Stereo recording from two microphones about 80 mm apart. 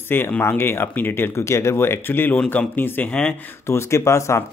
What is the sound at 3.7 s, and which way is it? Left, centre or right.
Speech, left.